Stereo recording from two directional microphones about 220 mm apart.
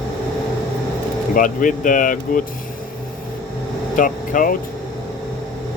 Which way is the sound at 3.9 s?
40° left (ahead or behind).